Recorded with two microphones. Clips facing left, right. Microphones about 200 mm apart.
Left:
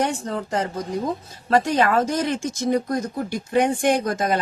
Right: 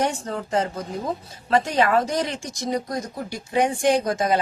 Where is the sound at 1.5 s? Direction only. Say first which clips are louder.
Left 1 dB; 40° left (ahead or behind).